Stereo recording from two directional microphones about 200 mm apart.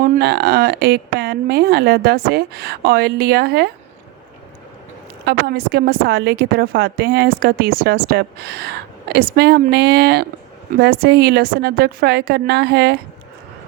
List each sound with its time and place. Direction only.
0.0 s a woman's voice: 50° right (ahead or behind)
5.2 s a woman's voice: 55° right (ahead or behind)